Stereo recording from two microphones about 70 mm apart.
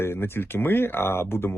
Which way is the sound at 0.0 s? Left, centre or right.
Left.